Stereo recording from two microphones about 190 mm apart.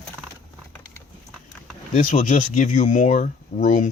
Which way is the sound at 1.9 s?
40° left (ahead or behind).